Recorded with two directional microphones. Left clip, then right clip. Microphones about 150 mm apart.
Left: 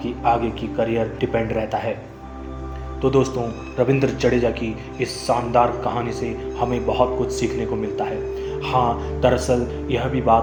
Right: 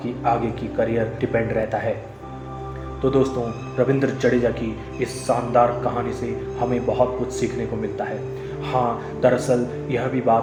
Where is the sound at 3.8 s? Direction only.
30° left (ahead or behind).